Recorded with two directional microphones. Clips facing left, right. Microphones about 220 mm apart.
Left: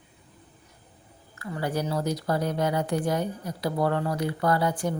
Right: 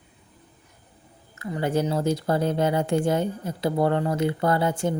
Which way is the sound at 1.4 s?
20° right (ahead or behind).